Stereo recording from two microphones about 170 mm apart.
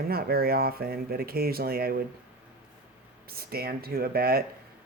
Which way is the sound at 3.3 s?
65° right (ahead or behind).